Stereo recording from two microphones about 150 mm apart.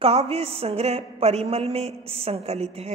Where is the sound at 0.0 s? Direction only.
45° right (ahead or behind).